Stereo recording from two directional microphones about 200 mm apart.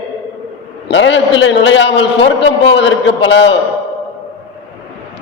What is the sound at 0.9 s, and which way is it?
A man's voice, 65° left (ahead or behind).